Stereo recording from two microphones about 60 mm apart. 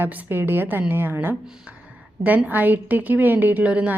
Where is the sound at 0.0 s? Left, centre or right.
Right.